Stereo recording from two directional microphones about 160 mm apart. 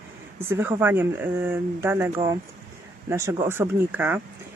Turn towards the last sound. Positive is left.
turn(degrees=-10)  # may be behind; listen again after turning